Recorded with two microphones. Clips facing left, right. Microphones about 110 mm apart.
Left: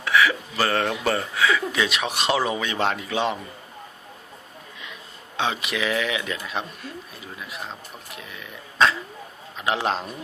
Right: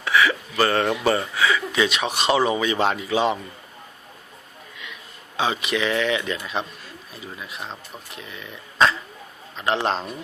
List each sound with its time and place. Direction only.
0.0 s speech: centre (ahead or behind)
5.4 s speech: centre (ahead or behind)